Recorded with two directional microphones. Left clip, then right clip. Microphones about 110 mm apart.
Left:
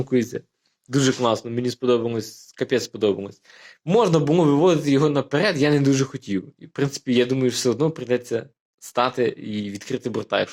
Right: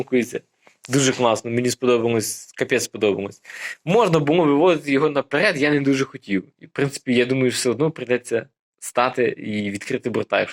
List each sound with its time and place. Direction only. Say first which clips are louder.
0.1 s speech: right 1 dB; 45° left (ahead or behind)
0.9 s speech: right 2 dB; 30° left (ahead or behind)